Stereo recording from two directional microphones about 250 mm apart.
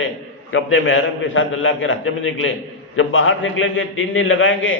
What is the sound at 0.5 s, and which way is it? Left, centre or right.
A man's voice, left.